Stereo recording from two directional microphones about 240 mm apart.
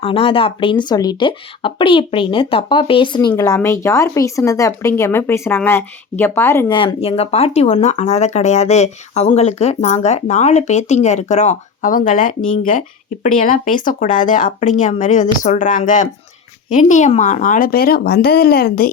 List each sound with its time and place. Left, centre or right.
0.0 s speech: left
6.7 s speech: left